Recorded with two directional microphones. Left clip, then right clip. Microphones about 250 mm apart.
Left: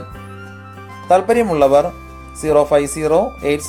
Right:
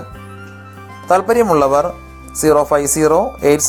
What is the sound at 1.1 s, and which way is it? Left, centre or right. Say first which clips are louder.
Speech: right 1 dB; centre.